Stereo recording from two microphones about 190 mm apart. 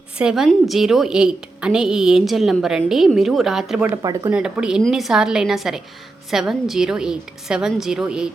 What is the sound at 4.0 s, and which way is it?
Speech, 20° right (ahead or behind).